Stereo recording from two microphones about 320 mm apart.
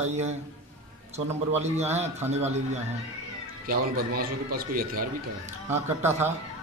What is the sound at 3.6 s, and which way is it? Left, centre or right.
A man's voice, right.